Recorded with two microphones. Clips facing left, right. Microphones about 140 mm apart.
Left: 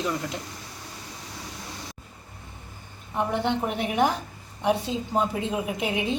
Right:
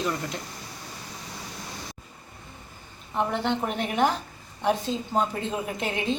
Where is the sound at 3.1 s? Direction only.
10° left (ahead or behind).